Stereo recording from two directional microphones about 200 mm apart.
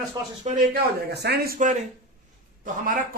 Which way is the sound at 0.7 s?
55° right (ahead or behind).